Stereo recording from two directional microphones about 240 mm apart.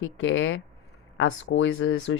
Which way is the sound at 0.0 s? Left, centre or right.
Left.